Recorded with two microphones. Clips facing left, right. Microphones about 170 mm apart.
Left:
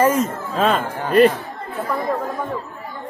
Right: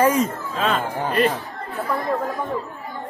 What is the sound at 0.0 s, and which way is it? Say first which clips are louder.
Speech: left 1 dB; centre (ahead or behind).